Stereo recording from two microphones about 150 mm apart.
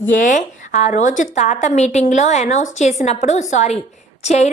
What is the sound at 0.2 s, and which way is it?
A woman's voice, 55° left (ahead or behind).